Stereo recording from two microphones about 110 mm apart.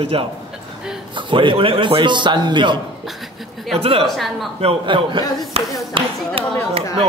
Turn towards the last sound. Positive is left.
turn(degrees=-55)  # may be behind; listen again after turning